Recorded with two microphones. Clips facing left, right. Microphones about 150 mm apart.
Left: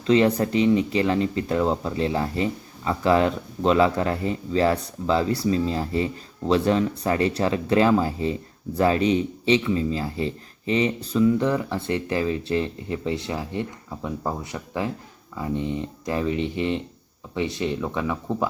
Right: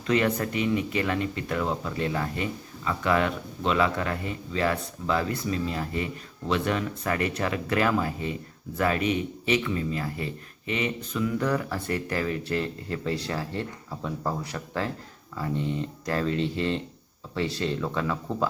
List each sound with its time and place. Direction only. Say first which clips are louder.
0.0 s speech: left 6 dB; 25° left (ahead or behind)